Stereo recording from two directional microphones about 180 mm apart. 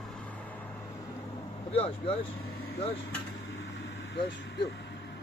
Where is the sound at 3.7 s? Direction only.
80° left.